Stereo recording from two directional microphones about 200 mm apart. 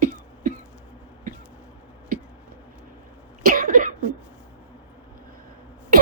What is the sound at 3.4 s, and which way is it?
Cough, 45° right (ahead or behind).